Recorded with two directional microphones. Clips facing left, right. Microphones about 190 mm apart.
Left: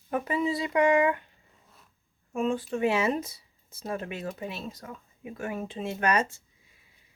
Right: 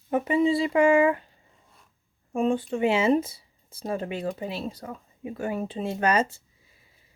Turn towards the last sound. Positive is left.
turn(degrees=-30)  # may be behind; listen again after turning